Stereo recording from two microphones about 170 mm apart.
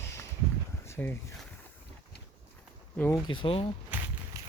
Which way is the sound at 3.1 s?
30° left (ahead or behind).